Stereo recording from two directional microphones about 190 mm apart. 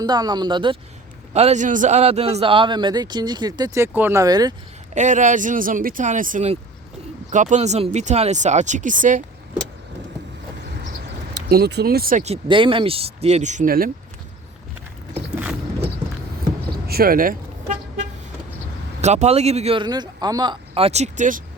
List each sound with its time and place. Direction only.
0.0 s a man's voice: 20° right (ahead or behind)
4.9 s speech: 40° right (ahead or behind)
10.7 s vehicle: 55° right (ahead or behind)
11.3 s speech: 55° right (ahead or behind)
12.2 s speech: 30° right (ahead or behind); by 13.9 s 50° right (ahead or behind)
15.1 s vehicle: 5° right (ahead or behind)
16.8 s toot: 55° right (ahead or behind)
19.0 s speech: 35° right (ahead or behind)